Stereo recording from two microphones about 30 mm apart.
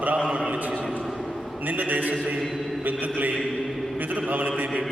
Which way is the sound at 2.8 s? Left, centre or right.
Right.